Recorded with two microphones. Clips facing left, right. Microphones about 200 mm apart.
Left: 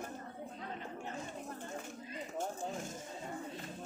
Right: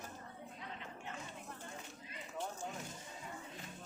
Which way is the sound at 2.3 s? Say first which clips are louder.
Left 4 dB; 45° left (ahead or behind).